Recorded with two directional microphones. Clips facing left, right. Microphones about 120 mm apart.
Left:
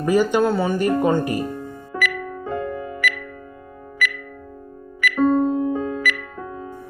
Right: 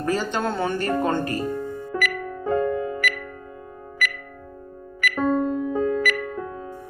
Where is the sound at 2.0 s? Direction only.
45° right (ahead or behind).